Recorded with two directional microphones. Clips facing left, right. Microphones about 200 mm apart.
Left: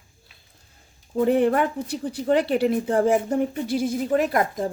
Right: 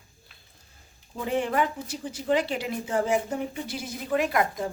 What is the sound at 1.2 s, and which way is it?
Speech, 55° left (ahead or behind).